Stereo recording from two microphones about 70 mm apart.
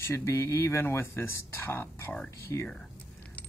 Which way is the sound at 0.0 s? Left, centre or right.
Left.